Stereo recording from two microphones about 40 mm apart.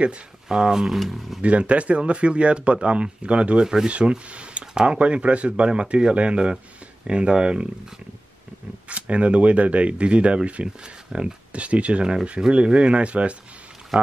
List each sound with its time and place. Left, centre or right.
0.5 s speech: centre
0.9 s speech: centre
1.4 s speech: right
3.6 s speech: centre
4.3 s speech: right
8.8 s speech: right
11.1 s speech: centre
11.5 s speech: right